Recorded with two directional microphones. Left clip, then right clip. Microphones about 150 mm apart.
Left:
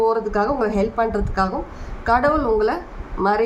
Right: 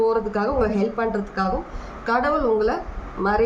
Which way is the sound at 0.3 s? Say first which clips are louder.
Left 2 dB; 50° left (ahead or behind).